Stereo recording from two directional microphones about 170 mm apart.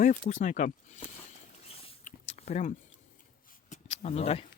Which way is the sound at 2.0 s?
45° left (ahead or behind).